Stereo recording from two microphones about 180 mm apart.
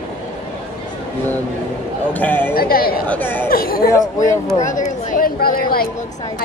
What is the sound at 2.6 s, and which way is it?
Speech, 55° left (ahead or behind).